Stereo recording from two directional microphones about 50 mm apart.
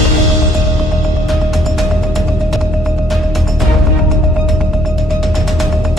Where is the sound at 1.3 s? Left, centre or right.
Centre.